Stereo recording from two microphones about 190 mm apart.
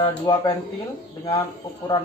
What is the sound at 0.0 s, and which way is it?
Speech, 25° left (ahead or behind).